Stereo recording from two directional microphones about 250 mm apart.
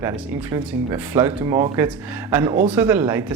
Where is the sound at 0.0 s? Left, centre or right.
Centre.